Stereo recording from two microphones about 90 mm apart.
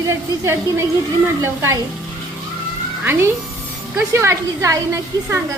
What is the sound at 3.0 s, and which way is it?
A woman's voice, 30° right (ahead or behind).